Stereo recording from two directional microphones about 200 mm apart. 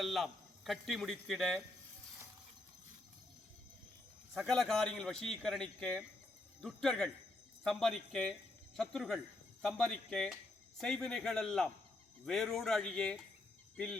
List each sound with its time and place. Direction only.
0.0 s speech: centre (ahead or behind)
4.4 s a man's voice: centre (ahead or behind)